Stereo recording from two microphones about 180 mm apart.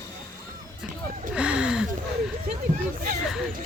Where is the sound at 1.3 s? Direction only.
5° right (ahead or behind).